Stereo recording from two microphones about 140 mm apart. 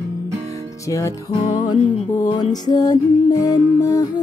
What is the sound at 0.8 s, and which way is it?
Music, 20° left (ahead or behind).